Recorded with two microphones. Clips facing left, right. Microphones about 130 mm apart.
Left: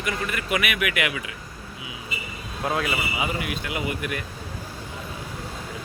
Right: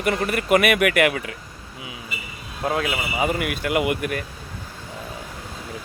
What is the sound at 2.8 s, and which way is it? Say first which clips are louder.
Speech: right 3 dB; 45° right (ahead or behind).